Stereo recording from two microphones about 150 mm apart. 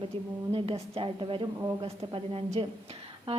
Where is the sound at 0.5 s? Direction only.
40° right (ahead or behind).